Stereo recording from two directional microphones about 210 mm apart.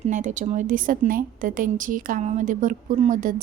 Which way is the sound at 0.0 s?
35° right (ahead or behind).